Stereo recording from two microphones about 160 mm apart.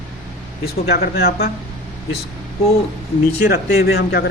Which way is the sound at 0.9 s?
70° left (ahead or behind).